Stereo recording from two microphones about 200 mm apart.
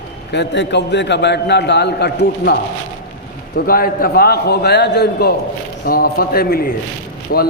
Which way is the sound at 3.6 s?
45° left (ahead or behind).